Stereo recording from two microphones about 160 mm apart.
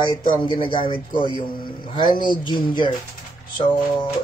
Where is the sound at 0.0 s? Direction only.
30° left (ahead or behind).